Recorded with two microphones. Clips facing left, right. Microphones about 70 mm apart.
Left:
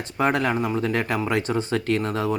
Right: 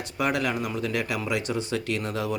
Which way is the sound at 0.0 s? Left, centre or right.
Left.